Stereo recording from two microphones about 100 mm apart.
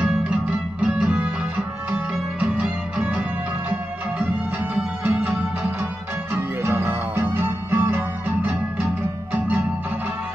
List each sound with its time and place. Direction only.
0.0 s music: 10° right (ahead or behind)
2.4 s music: 15° right (ahead or behind)
4.7 s music: 10° right (ahead or behind)
6.6 s music: 20° right (ahead or behind)